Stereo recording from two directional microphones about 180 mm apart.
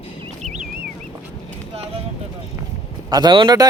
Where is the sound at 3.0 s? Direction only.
25° right (ahead or behind).